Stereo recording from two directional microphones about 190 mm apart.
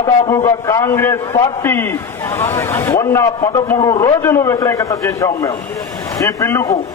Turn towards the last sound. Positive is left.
turn(degrees=15)  # may be behind; listen again after turning